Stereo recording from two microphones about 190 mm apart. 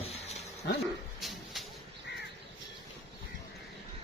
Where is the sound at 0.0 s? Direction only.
35° left (ahead or behind).